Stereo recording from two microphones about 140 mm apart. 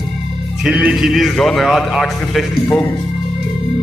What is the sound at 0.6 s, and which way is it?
A man's voice, 5° right (ahead or behind).